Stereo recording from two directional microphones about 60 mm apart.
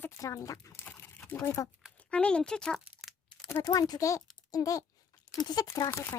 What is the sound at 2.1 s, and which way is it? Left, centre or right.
Speech, centre.